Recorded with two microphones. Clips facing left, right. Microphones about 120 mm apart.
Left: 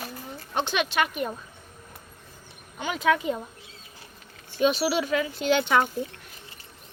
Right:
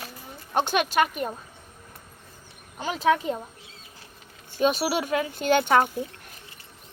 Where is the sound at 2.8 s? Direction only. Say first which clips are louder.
Right 1 dB; 35° right (ahead or behind).